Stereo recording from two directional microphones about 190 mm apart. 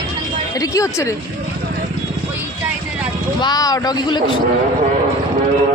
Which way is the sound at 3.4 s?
20° left (ahead or behind).